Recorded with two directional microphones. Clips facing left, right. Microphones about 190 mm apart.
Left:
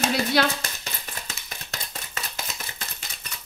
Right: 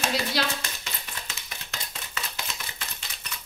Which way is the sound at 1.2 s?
40° left (ahead or behind).